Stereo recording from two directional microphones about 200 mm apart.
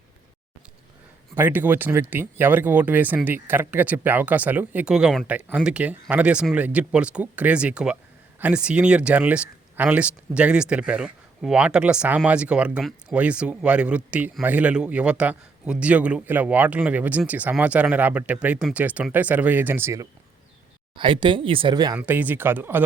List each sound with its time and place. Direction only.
1.4 s speech: 10° right (ahead or behind)
20.9 s speech: 25° right (ahead or behind)
21.9 s speech: 10° right (ahead or behind)